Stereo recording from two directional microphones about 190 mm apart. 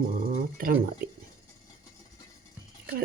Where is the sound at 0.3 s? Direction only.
45° right (ahead or behind).